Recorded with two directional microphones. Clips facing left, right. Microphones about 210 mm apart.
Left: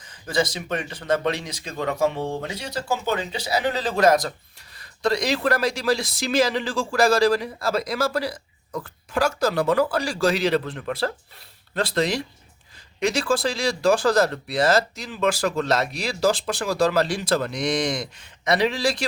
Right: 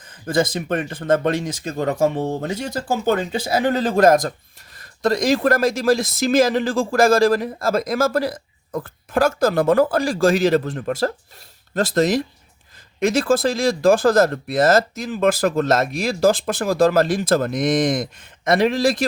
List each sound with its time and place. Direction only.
0.0 s speech: 55° right (ahead or behind)